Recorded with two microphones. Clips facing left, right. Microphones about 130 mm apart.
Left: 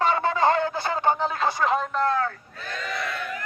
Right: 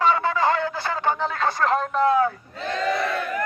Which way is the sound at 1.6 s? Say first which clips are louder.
Right 5 dB; centre (ahead or behind).